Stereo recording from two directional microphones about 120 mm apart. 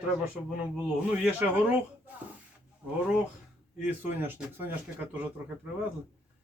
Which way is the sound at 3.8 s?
15° right (ahead or behind).